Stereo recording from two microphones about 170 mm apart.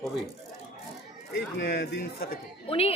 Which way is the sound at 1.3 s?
70° left (ahead or behind).